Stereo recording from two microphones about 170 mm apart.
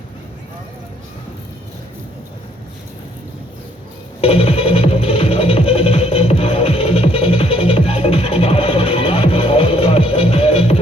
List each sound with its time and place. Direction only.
4.2 s music: 35° left (ahead or behind)